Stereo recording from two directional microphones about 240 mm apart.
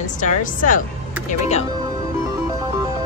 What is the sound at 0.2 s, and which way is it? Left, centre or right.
Speech, left.